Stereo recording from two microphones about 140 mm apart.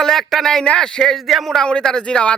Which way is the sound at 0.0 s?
Centre (ahead or behind).